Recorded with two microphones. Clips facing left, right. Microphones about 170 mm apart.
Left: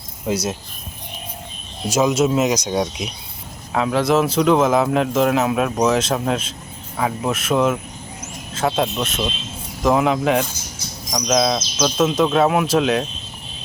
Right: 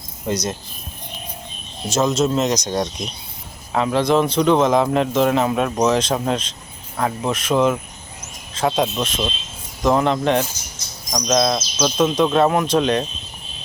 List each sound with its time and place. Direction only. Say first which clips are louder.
0.3 s a man's voice: left 1 dB; 5° left (ahead or behind)
1.9 s a man's voice: left 1 dB; 10° left (ahead or behind)